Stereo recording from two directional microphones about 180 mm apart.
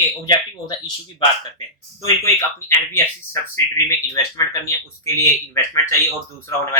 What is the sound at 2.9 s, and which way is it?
Speech, 15° left (ahead or behind).